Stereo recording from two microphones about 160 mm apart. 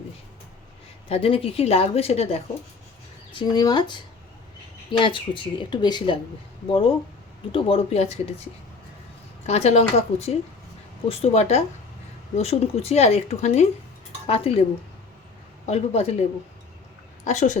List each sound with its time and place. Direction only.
1.0 s speech: 35° left (ahead or behind)
3.3 s speech: 25° left (ahead or behind); by 8.2 s 40° left (ahead or behind)
9.5 s speech: 40° left (ahead or behind)
15.6 s speech: 45° left (ahead or behind)
17.2 s a woman's voice: 50° left (ahead or behind)